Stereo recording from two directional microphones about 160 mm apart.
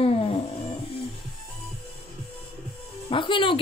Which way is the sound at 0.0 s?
35° left (ahead or behind).